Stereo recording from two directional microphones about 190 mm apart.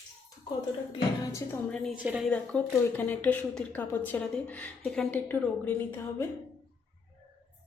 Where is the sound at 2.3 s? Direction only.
5° left (ahead or behind).